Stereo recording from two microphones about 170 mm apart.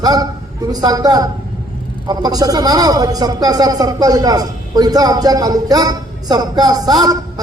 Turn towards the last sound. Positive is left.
turn(degrees=-25)  # may be behind; listen again after turning